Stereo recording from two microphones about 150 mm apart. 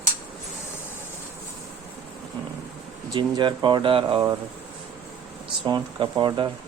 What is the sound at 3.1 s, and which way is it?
Speech, 30° right (ahead or behind).